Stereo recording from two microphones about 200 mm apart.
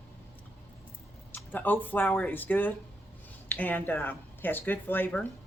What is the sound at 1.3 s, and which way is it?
Speech, 10° left (ahead or behind).